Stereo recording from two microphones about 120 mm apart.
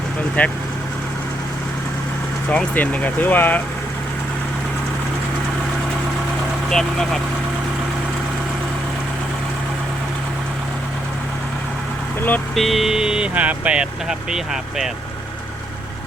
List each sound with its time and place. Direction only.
0.4 s speech: 15° left (ahead or behind)
2.5 s speech: 10° left (ahead or behind)
6.7 s speech: 5° left (ahead or behind)
12.5 s speech: centre (ahead or behind)